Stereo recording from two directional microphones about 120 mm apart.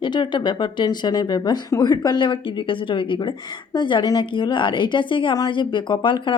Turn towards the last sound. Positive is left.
turn(degrees=40)  # may be behind; listen again after turning